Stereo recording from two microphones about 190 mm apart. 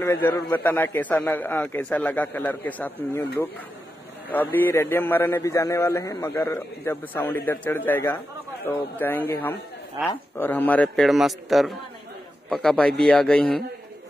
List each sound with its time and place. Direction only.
0.0 s a man's voice: 15° left (ahead or behind)
4.3 s a man's voice: 10° left (ahead or behind)
10.0 s speech: 10° right (ahead or behind)
10.3 s a man's voice: 10° left (ahead or behind)